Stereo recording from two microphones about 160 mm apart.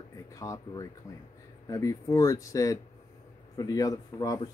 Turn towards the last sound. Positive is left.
turn(degrees=25)  # may be behind; listen again after turning